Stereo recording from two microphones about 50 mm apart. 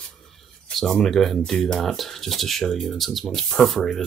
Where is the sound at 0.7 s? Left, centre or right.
Centre.